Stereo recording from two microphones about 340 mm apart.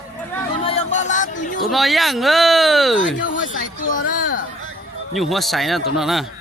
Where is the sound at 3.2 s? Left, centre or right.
Left.